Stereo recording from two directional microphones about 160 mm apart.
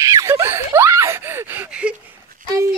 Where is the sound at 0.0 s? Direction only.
20° right (ahead or behind).